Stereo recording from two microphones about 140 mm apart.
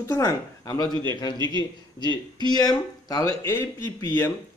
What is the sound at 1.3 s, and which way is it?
Speech, 30° right (ahead or behind).